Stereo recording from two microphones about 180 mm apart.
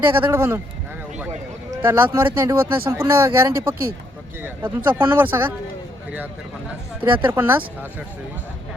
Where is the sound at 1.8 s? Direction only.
10° right (ahead or behind).